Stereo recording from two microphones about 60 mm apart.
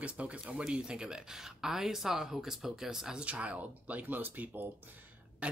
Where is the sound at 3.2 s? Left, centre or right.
Right.